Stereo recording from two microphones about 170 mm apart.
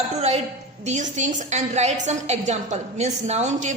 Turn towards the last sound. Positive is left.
turn(degrees=-40)  # may be behind; listen again after turning